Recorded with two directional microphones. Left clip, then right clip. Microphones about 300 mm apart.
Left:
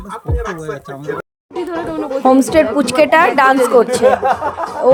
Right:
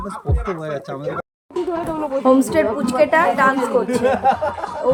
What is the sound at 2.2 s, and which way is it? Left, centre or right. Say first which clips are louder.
A woman's voice: left 5 dB; left.